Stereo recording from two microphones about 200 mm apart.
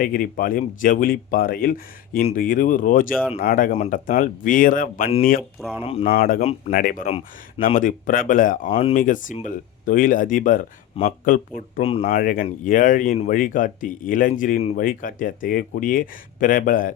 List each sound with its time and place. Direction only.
0.0 s speech: 45° left (ahead or behind)
5.4 s speech: 5° right (ahead or behind)
5.8 s speech: 30° left (ahead or behind)
6.1 s speech: 45° left (ahead or behind)
8.7 s speech: 30° left (ahead or behind)
9.0 s speech: 40° left (ahead or behind)
11.0 s speech: 30° left (ahead or behind)
12.0 s speech: 45° left (ahead or behind)